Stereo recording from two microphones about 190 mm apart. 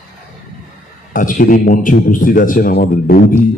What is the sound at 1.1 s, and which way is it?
A man's voice, 45° left (ahead or behind).